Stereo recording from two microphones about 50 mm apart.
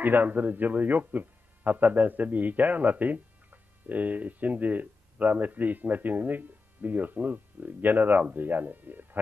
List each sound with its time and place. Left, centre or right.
0.0 s a man's voice: right